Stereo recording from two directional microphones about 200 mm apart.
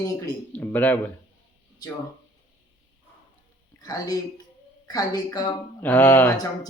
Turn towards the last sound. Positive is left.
turn(degrees=10)  # may be behind; listen again after turning